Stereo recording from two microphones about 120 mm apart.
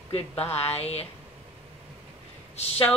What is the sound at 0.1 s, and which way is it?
Speech, 60° left (ahead or behind).